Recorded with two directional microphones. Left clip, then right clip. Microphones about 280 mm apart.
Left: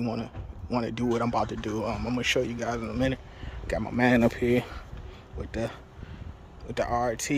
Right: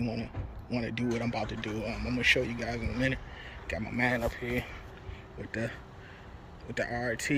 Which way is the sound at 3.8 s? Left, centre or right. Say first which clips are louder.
Left 6 dB; left.